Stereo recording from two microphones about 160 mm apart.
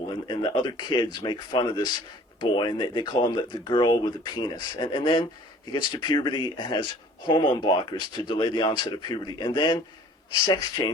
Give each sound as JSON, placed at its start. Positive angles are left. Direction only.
{"t": 0.3, "sound": "speech", "side_deg": 30}